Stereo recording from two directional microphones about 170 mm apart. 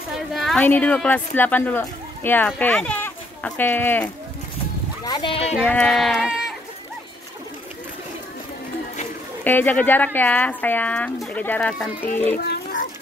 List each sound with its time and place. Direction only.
0.3 s speech: centre (ahead or behind)
5.0 s speech: 25° left (ahead or behind)
5.9 s speech: centre (ahead or behind)
9.4 s speech: 10° left (ahead or behind)